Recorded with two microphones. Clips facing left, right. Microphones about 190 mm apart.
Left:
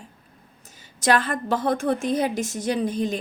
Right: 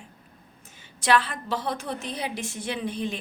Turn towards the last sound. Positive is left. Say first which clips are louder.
# left 6 dB
turn(degrees=40)  # may be behind; listen again after turning